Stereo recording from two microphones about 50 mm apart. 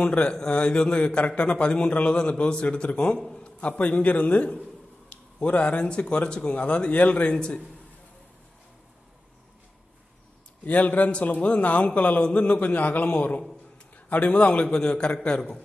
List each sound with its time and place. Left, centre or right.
0.0 s a man's voice: centre
3.2 s a man's voice: centre
3.4 s a man's voice: left
10.6 s a man's voice: left